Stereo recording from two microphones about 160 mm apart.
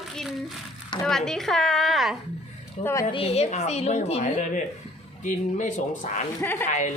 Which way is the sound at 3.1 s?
35° left (ahead or behind).